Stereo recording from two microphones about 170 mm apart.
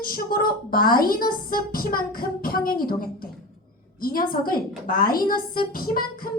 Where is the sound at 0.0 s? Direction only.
60° left (ahead or behind).